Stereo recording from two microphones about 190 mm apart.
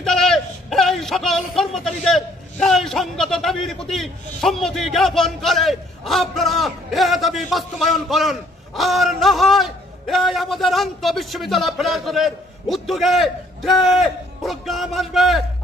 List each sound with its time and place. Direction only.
0.0 s a man's voice: centre (ahead or behind)